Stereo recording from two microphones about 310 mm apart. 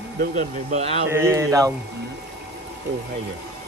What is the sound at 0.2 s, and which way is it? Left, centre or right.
Speech, right.